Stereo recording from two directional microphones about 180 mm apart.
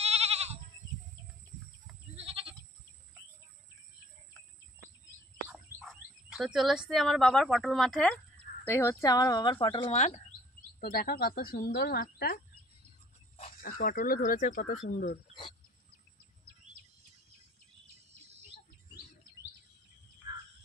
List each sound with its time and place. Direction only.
0.0 s goat: 35° right (ahead or behind)
2.1 s goat: 30° right (ahead or behind)
5.5 s speech: centre (ahead or behind)
8.6 s speech: 15° left (ahead or behind); by 10.2 s 40° left (ahead or behind)
10.8 s speech: 55° left (ahead or behind)
13.6 s speech: 50° left (ahead or behind)
20.2 s bird: 25° right (ahead or behind)